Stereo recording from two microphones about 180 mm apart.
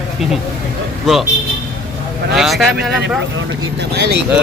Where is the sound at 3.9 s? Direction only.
65° right (ahead or behind).